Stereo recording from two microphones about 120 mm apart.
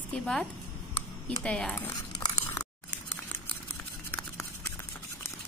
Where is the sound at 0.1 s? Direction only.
5° left (ahead or behind).